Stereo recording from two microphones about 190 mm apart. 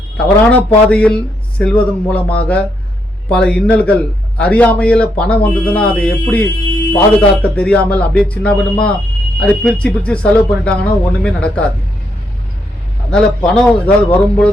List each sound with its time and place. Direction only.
0.2 s speech: 5° left (ahead or behind)
13.1 s speech: 5° left (ahead or behind)